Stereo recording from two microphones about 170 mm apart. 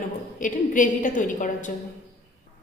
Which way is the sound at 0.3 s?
50° left (ahead or behind).